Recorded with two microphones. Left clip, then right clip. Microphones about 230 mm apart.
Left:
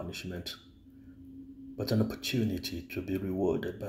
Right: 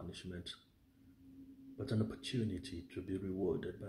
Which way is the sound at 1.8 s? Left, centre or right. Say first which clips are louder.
Left 9 dB; centre.